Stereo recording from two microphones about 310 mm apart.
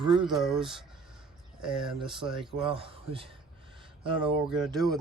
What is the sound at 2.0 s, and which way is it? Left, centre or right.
Speech, centre.